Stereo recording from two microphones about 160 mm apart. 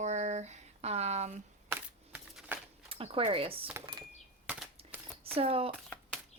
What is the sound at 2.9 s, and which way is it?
Speech, 35° right (ahead or behind).